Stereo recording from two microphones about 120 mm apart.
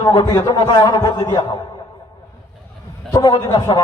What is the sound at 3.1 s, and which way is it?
Speech, 35° left (ahead or behind).